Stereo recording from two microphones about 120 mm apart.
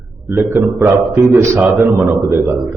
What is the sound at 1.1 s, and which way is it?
A man's voice, 25° right (ahead or behind).